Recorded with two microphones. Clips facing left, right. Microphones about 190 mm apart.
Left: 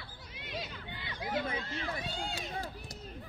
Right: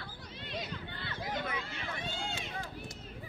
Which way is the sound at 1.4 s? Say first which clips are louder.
Left 2 dB; 35° left (ahead or behind).